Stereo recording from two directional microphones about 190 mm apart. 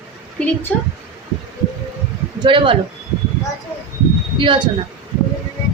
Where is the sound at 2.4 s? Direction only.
25° right (ahead or behind).